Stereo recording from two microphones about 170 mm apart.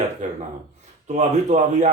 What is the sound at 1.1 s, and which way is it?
Speech, 45° right (ahead or behind).